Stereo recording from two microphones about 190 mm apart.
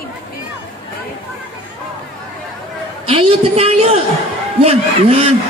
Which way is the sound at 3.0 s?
30° right (ahead or behind).